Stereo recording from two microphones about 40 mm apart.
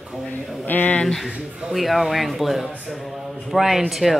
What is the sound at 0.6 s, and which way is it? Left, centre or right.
Speech, left.